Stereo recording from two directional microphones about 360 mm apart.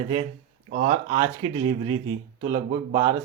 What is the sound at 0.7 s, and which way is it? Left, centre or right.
Speech, right.